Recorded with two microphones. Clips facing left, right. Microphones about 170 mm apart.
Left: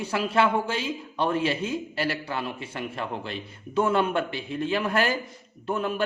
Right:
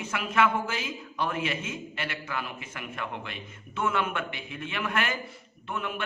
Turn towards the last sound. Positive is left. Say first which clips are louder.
# left 7 dB
turn(degrees=35)  # may be behind; listen again after turning